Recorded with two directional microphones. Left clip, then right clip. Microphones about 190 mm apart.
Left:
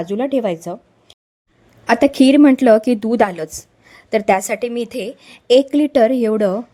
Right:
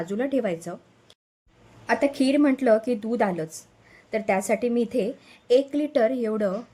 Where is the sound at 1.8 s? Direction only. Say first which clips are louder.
Left 10 dB; 50° left (ahead or behind).